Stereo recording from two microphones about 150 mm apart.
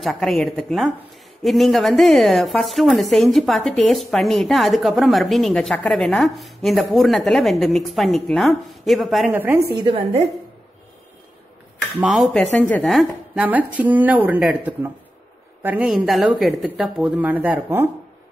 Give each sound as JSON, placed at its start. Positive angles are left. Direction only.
{"t": 0.0, "sound": "a woman's voice", "side_deg": 0}
{"t": 9.3, "sound": "speech", "side_deg": -15}
{"t": 9.8, "sound": "a woman's voice", "side_deg": -35}
{"t": 12.0, "sound": "a woman's voice", "side_deg": 0}
{"t": 12.4, "sound": "speech", "side_deg": 10}
{"t": 12.8, "sound": "speech", "side_deg": 0}